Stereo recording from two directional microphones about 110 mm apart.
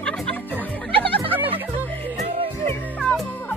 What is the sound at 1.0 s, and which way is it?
Music, 55° right (ahead or behind).